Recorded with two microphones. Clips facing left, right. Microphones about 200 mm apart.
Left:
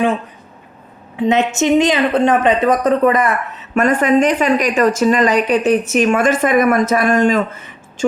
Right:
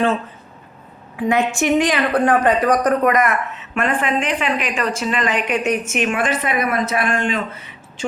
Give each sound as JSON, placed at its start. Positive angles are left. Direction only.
{"t": 1.1, "sound": "a woman's voice", "side_deg": 20}
{"t": 3.8, "sound": "speech", "side_deg": 40}